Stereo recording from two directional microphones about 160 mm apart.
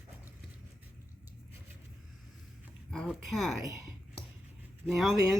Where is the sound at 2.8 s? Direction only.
Centre (ahead or behind).